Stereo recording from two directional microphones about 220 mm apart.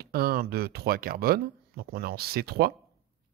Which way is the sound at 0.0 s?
45° right (ahead or behind).